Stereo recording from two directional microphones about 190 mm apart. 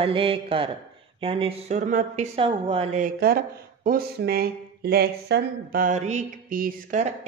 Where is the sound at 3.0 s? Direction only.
50° right (ahead or behind).